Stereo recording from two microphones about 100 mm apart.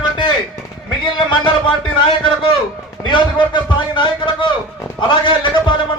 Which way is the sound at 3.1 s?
50° left (ahead or behind).